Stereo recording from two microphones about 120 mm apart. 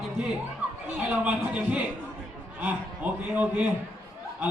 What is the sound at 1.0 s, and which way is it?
Speech, 10° right (ahead or behind).